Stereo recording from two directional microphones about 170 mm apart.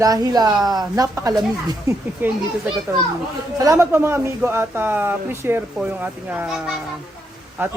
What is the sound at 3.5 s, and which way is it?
Speech, 20° right (ahead or behind).